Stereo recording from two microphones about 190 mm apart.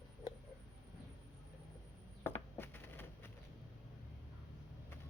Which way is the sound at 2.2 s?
10° left (ahead or behind).